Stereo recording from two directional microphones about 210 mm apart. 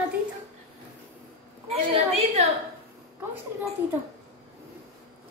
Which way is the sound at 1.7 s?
30° right (ahead or behind).